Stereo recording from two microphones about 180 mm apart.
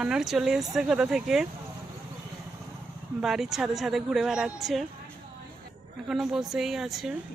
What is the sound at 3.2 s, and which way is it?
Speech, centre (ahead or behind).